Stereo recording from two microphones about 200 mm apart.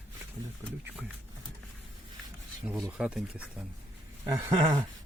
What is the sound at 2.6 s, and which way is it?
Speech, 5° right (ahead or behind).